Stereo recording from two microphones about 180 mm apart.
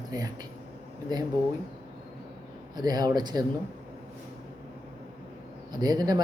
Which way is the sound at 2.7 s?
20° right (ahead or behind).